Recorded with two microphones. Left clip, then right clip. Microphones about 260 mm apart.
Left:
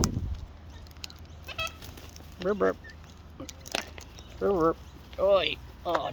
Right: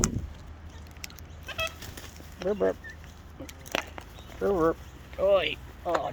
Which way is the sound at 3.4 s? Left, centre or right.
Centre.